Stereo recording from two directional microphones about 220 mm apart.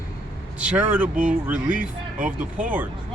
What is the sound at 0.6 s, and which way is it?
Speech, 5° right (ahead or behind).